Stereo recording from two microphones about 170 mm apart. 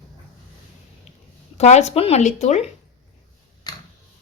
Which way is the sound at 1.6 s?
40° left (ahead or behind).